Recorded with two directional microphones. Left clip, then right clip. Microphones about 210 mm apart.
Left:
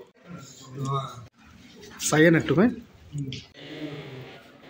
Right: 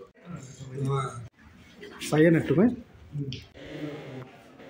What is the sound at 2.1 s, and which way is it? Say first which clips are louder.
Speech: left 2 dB; centre (ahead or behind).